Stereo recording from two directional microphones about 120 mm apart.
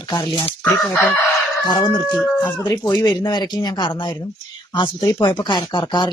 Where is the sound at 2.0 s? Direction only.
Centre (ahead or behind).